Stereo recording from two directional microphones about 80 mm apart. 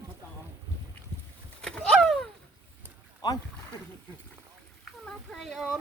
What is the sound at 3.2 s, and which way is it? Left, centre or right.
Speech, left.